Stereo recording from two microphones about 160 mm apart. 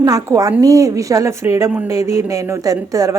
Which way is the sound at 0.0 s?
20° right (ahead or behind).